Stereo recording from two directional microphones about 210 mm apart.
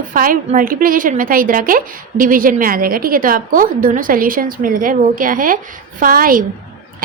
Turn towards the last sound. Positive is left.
turn(degrees=-40)  # may be behind; listen again after turning